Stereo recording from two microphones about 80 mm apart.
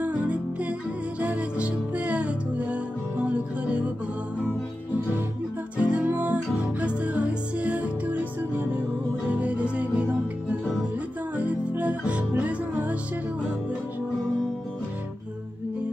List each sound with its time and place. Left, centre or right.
0.0 s music: centre
5.8 s music: centre
11.3 s music: centre